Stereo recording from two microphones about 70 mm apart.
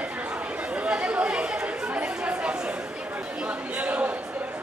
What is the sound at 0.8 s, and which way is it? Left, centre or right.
Chatter, centre.